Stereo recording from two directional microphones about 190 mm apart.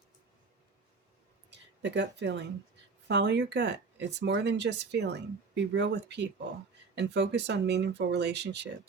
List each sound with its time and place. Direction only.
1.5 s speech: 65° right (ahead or behind)